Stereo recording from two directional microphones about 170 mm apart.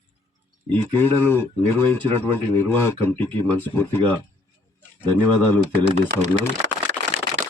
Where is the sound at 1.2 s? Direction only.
10° left (ahead or behind).